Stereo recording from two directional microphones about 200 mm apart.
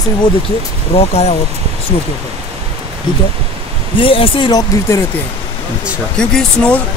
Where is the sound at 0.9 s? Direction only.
30° left (ahead or behind).